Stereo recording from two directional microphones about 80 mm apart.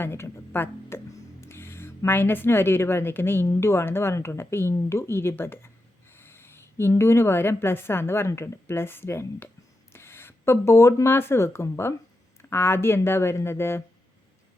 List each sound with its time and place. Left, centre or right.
0.0 s music: left
2.0 s a woman's voice: left